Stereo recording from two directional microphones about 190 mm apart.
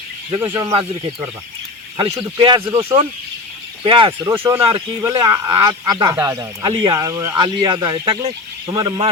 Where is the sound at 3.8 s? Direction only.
25° right (ahead or behind).